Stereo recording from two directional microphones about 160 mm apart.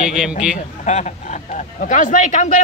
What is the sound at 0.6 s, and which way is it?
Speech, 50° left (ahead or behind).